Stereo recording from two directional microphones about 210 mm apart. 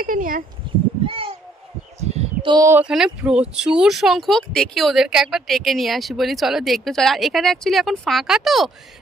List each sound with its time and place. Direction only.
0.0 s speech: 40° right (ahead or behind)
1.0 s a sound: 25° right (ahead or behind)
2.0 s speech: 30° right (ahead or behind); by 8.7 s centre (ahead or behind)